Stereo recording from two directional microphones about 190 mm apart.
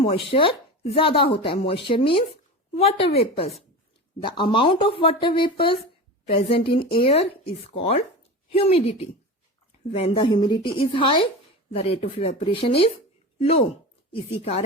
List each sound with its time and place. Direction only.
0.0 s speech: 30° left (ahead or behind)